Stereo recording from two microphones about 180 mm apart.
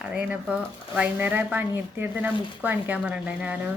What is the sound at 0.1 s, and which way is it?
Speech, 5° right (ahead or behind).